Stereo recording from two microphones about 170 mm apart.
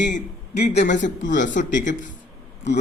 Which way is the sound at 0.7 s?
40° left (ahead or behind).